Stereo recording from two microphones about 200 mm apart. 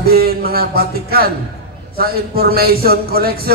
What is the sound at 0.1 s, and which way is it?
A man's voice, 50° right (ahead or behind).